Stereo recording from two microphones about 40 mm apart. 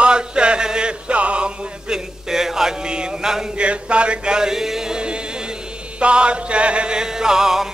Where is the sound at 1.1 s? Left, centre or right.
Right.